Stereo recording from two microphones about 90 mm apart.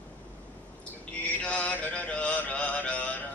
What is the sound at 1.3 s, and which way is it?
Mantra, 15° left (ahead or behind).